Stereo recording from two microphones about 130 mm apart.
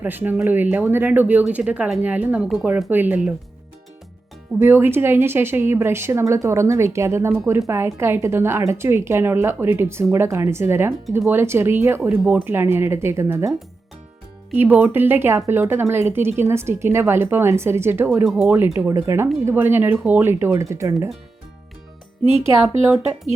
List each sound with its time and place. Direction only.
0.0 s speech: 15° right (ahead or behind)
2.9 s speech: 15° right (ahead or behind)
4.6 s a woman's voice: 15° right (ahead or behind)
14.5 s a woman's voice: 15° right (ahead or behind)
18.3 s a woman's voice: 5° right (ahead or behind)
18.5 s a woman's voice: 15° right (ahead or behind)
22.6 s a woman's voice: centre (ahead or behind)